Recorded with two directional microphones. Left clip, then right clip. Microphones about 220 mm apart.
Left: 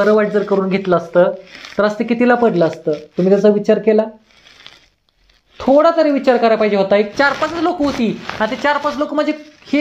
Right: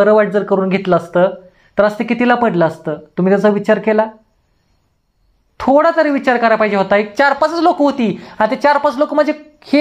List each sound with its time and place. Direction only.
0.0 s speech: 40° right (ahead or behind)
5.6 s speech: 35° right (ahead or behind)